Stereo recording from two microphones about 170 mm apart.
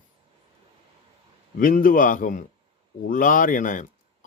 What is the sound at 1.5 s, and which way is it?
Speech, 55° left (ahead or behind).